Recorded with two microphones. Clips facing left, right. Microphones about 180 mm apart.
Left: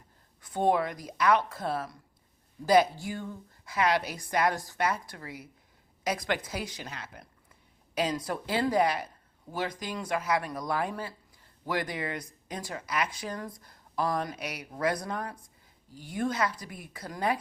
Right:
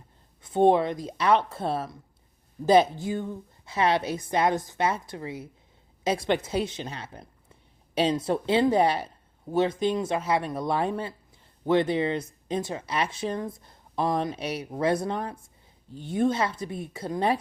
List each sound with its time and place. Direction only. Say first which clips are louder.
0.4 s speech: right 6 dB; 25° right (ahead or behind)